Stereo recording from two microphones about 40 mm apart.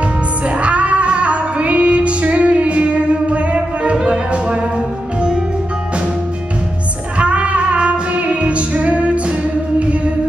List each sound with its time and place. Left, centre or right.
0.6 s female singing: right
7.2 s music: right